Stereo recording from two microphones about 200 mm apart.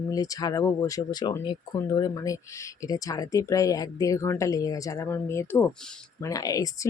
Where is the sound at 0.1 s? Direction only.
20° left (ahead or behind).